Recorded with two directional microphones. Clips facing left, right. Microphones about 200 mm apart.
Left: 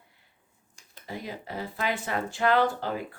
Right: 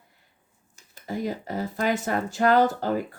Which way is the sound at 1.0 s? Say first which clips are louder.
Right 8 dB; 45° right (ahead or behind).